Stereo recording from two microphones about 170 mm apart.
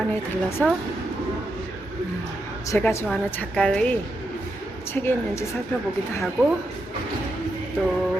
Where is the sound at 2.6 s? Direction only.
15° left (ahead or behind).